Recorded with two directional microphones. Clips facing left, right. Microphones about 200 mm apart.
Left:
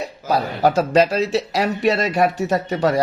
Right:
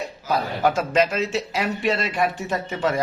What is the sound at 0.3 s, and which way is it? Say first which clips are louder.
A man's voice: left 3 dB; 35° left (ahead or behind).